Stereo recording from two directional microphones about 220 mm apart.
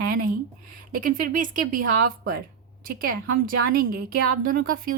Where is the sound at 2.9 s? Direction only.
40° right (ahead or behind).